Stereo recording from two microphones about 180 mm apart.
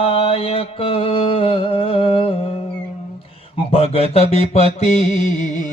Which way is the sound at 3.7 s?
30° left (ahead or behind).